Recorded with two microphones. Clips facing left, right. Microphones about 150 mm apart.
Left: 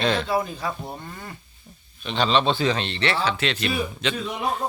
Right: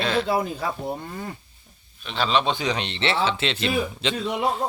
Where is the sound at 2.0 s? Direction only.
5° right (ahead or behind).